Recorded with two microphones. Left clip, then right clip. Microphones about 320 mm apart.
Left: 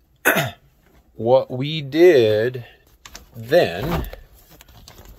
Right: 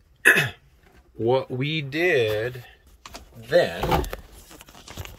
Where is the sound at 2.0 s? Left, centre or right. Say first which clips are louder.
Left 9 dB; centre.